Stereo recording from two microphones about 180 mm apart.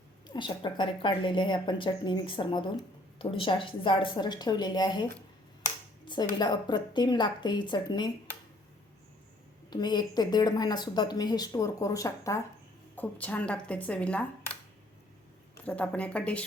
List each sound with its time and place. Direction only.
0.3 s a woman's voice: 25° left (ahead or behind)
6.1 s a woman's voice: 25° left (ahead or behind)
9.6 s a woman's voice: 25° left (ahead or behind); by 14.3 s 5° left (ahead or behind)
15.6 s a woman's voice: 5° left (ahead or behind)